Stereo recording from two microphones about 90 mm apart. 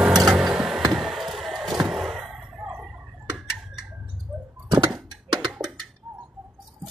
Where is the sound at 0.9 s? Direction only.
5° right (ahead or behind).